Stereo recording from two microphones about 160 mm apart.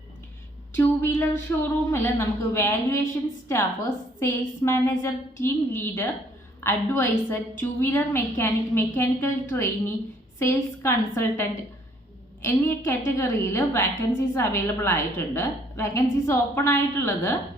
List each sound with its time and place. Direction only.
0.7 s a woman's voice: 15° left (ahead or behind)